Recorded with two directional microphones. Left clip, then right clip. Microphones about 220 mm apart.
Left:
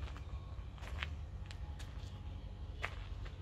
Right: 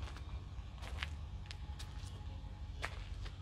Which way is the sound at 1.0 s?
Centre (ahead or behind).